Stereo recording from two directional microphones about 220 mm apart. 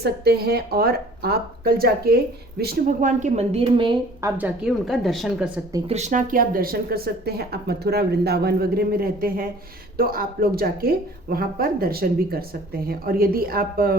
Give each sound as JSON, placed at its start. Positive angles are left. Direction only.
{"t": 0.0, "sound": "a woman's voice", "side_deg": -45}
{"t": 4.4, "sound": "speech", "side_deg": -5}
{"t": 5.9, "sound": "speech", "side_deg": -30}